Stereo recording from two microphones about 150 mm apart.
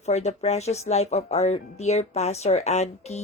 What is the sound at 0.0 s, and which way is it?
Speech, 50° left (ahead or behind).